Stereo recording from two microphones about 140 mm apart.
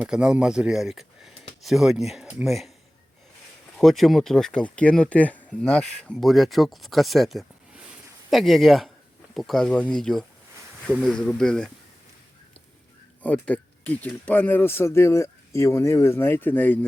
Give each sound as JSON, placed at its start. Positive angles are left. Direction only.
{"t": 0.0, "sound": "speech", "side_deg": -5}
{"t": 3.8, "sound": "speech", "side_deg": 0}
{"t": 13.2, "sound": "speech", "side_deg": 10}